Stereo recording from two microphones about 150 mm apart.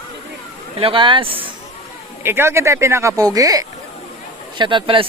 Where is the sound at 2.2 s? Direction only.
15° right (ahead or behind).